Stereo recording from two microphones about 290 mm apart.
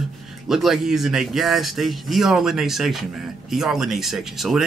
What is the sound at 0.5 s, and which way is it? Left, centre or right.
Speech, centre.